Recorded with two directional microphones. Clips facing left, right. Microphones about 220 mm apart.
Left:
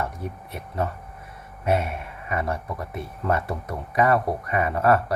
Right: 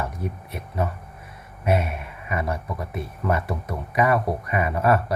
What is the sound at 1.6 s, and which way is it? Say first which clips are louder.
Speech: even; 20° right (ahead or behind).